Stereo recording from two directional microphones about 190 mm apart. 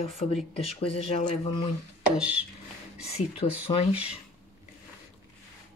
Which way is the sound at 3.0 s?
35° left (ahead or behind).